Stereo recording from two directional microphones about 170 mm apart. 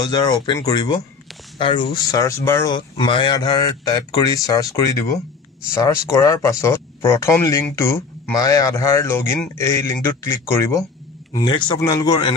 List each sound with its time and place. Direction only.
0.1 s speech: 25° left (ahead or behind)
2.0 s speech: 20° left (ahead or behind)